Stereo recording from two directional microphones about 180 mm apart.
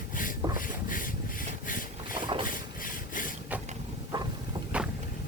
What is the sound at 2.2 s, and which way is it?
Boat, 25° right (ahead or behind).